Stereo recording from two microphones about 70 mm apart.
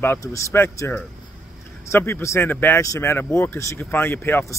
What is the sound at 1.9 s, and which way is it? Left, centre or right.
Speech, left.